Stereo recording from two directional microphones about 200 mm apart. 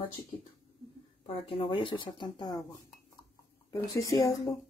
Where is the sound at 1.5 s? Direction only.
25° left (ahead or behind).